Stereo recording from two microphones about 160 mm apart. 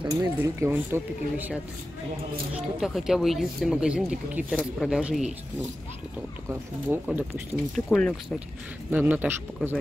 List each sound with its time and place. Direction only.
0.0 s speech: 20° right (ahead or behind)
2.5 s speech: 5° right (ahead or behind)
6.9 s speech: 10° right (ahead or behind)
7.7 s speech: centre (ahead or behind)
8.9 s speech: 10° right (ahead or behind)